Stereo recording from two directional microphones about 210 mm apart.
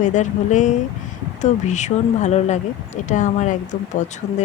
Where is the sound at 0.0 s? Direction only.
35° left (ahead or behind).